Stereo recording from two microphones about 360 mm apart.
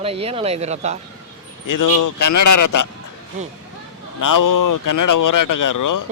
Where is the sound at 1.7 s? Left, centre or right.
Left.